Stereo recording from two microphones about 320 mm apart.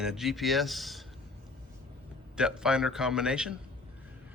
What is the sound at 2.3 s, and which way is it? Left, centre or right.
Speech, centre.